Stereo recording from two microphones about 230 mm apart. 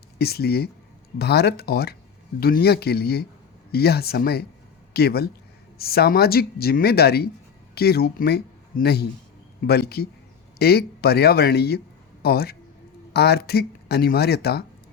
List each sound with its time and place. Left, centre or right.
0.2 s speech: left